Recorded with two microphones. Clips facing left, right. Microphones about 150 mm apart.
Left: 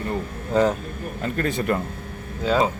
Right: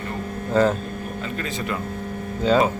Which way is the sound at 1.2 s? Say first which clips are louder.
Left 7 dB; 50° left (ahead or behind).